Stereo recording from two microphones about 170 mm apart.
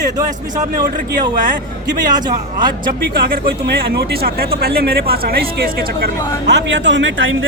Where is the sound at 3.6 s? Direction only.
75° right (ahead or behind).